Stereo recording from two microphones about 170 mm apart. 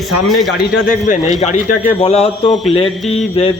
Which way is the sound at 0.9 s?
50° left (ahead or behind).